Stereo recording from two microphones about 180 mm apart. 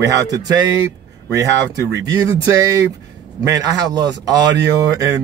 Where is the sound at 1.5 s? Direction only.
75° right (ahead or behind).